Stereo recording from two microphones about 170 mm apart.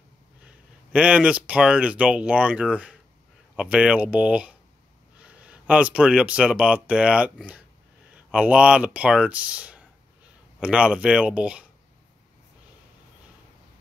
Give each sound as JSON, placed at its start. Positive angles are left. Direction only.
{"t": 0.5, "sound": "speech", "side_deg": -5}